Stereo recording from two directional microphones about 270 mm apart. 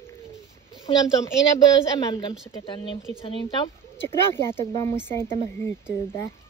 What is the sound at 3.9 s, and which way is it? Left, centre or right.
Speech, centre.